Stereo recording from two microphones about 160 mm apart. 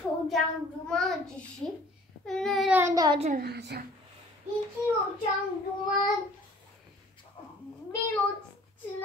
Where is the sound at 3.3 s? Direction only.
90° right.